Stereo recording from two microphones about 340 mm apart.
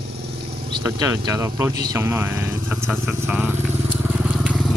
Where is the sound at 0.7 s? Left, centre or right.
Centre.